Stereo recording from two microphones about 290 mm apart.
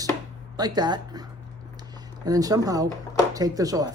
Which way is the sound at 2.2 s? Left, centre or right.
Centre.